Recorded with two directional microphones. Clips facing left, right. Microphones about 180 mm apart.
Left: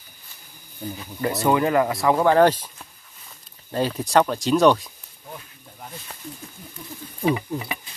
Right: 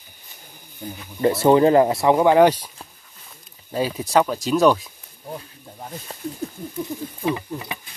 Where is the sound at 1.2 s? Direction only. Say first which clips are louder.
Right 6 dB; 30° right (ahead or behind); by 2.7 s 10° right (ahead or behind).